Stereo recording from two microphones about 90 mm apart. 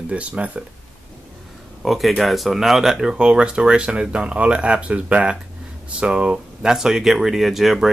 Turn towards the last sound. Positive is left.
turn(degrees=-5)  # may be behind; listen again after turning